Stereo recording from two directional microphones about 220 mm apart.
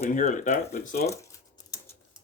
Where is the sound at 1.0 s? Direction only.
15° left (ahead or behind).